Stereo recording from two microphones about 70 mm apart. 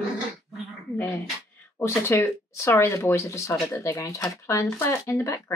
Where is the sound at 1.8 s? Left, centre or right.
Left.